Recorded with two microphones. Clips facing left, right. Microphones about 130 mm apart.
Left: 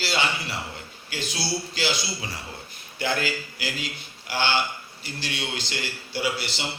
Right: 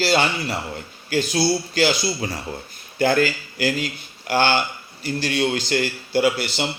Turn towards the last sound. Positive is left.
turn(degrees=-50)  # may be behind; listen again after turning